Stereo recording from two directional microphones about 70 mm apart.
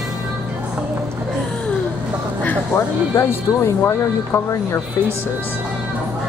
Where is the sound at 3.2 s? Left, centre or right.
Left.